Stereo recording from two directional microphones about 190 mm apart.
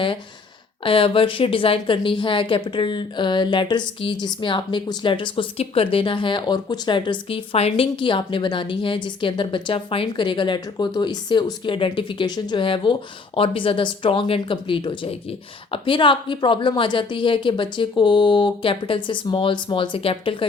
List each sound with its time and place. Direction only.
0.9 s speech: 30° left (ahead or behind)